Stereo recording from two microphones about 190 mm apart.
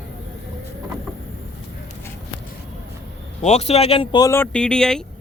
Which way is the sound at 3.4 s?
35° left (ahead or behind).